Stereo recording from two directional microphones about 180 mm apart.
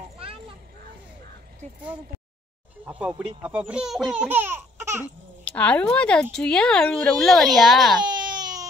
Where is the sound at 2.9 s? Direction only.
5° right (ahead or behind).